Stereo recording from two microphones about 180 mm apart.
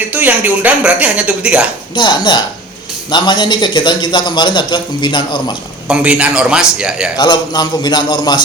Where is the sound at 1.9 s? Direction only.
25° left (ahead or behind).